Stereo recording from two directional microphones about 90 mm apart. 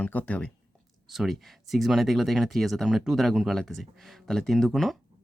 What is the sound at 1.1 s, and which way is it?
Speech, centre (ahead or behind).